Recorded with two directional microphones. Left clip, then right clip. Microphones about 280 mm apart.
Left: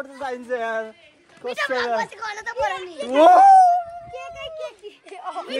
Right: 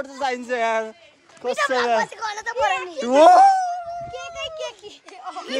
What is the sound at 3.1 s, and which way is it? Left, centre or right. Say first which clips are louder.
Speech: left 1 dB; centre.